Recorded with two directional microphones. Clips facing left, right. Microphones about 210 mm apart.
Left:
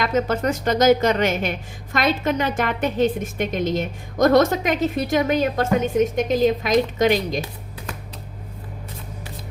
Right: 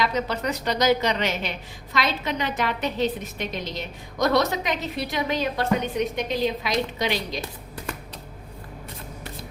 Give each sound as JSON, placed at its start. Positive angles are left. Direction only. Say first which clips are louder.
{"t": 0.0, "sound": "a woman's voice", "louder": "left 5 dB", "side_deg": 50}